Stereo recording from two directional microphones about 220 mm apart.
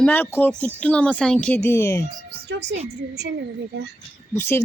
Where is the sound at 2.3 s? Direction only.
50° right (ahead or behind).